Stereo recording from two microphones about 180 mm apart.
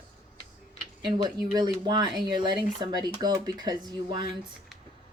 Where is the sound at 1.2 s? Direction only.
25° right (ahead or behind).